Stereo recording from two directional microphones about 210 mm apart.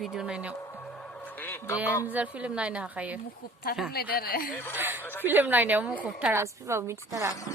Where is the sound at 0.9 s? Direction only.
10° left (ahead or behind).